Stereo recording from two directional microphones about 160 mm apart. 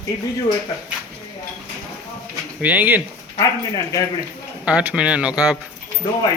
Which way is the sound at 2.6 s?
10° right (ahead or behind).